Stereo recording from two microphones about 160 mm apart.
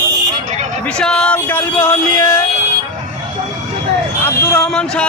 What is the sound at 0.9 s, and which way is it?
A man's voice, 5° left (ahead or behind).